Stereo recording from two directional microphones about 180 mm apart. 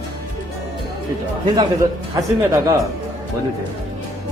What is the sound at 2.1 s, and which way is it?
Speech, 20° right (ahead or behind).